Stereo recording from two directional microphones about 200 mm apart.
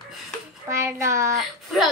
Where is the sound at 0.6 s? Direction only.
15° right (ahead or behind).